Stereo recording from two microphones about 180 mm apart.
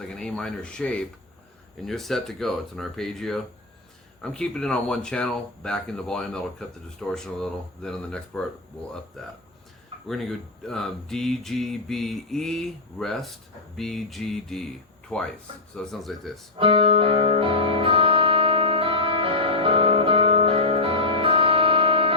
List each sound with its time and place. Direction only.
0.1 s speech: 5° left (ahead or behind)
16.6 s music: 30° right (ahead or behind)